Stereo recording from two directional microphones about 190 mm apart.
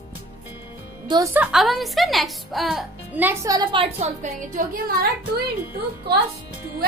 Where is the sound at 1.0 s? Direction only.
20° right (ahead or behind).